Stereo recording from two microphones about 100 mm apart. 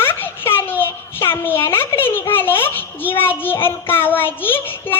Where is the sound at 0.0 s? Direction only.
20° left (ahead or behind).